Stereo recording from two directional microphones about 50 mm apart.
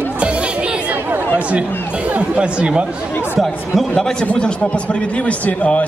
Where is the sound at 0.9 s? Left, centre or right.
Right.